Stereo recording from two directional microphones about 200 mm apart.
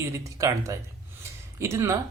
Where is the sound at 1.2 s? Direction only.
15° right (ahead or behind).